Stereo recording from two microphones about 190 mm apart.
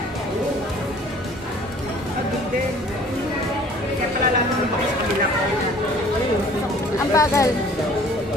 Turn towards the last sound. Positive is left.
turn(degrees=15)  # may be behind; listen again after turning